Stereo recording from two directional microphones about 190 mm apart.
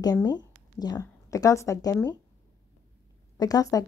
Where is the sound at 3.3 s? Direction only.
20° left (ahead or behind).